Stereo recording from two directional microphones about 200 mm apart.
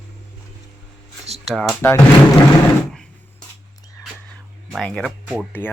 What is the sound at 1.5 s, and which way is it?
Speech, centre (ahead or behind).